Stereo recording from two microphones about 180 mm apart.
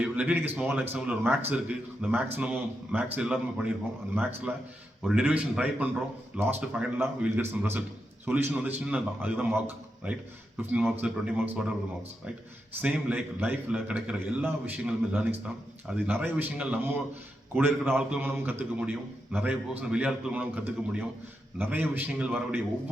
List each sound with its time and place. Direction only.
0.0 s a man's voice: 5° right (ahead or behind)
12.8 s a man's voice: 5° right (ahead or behind)